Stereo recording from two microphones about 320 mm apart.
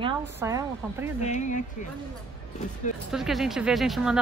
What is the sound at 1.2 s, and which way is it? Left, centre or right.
Speech, left.